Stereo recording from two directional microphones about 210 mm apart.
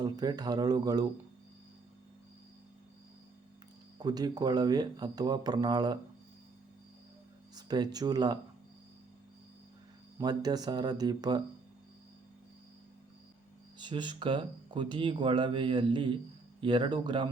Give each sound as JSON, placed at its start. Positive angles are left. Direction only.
{"t": 0.0, "sound": "speech", "side_deg": -20}
{"t": 3.9, "sound": "speech", "side_deg": -20}
{"t": 7.5, "sound": "speech", "side_deg": -20}
{"t": 10.2, "sound": "speech", "side_deg": -20}
{"t": 13.7, "sound": "speech", "side_deg": -20}